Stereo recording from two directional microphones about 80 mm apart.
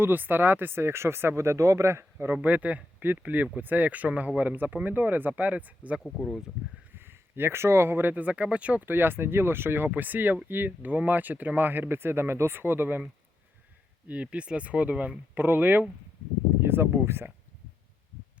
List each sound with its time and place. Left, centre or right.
0.0 s speech: right
14.1 s speech: centre